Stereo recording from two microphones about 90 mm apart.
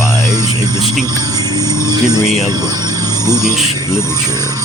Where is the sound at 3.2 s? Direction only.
45° right (ahead or behind).